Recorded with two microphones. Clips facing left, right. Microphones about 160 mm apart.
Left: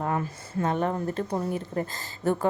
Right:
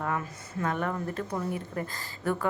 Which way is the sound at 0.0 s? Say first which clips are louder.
Left 3 dB; 30° left (ahead or behind).